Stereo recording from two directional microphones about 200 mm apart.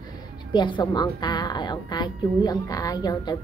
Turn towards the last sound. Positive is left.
turn(degrees=20)  # may be behind; listen again after turning